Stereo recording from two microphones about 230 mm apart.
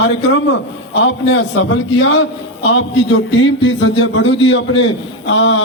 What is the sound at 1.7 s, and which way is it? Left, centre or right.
A man's voice, left.